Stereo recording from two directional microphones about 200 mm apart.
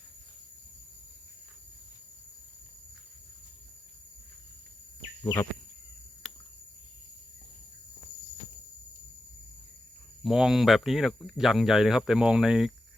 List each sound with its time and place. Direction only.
5.2 s speech: 20° left (ahead or behind)
10.2 s speech: centre (ahead or behind)